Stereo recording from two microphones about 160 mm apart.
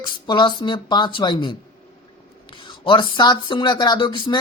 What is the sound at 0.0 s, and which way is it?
A man's voice, 30° left (ahead or behind).